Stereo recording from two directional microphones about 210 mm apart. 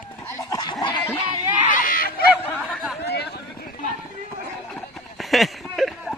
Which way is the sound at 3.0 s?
50° left (ahead or behind).